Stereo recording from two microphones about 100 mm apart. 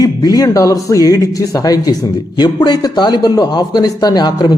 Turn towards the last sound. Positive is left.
turn(degrees=45)  # may be behind; listen again after turning